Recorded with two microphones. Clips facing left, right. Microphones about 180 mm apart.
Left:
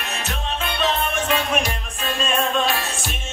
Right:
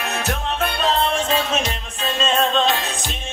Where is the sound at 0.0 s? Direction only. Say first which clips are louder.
Right 5 dB; 65° right (ahead or behind).